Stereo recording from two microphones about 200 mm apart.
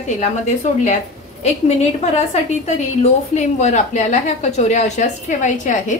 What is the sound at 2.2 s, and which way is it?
A woman's voice, 35° left (ahead or behind).